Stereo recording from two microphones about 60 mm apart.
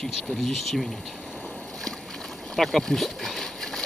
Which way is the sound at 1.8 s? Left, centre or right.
Centre.